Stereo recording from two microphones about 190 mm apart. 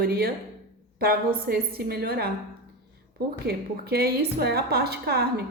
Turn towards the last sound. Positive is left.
turn(degrees=-55)  # may be behind; listen again after turning